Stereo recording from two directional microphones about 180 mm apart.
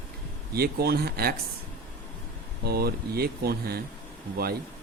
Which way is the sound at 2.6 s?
60° right (ahead or behind).